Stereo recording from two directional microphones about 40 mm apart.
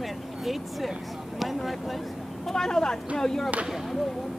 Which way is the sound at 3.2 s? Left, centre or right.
Centre.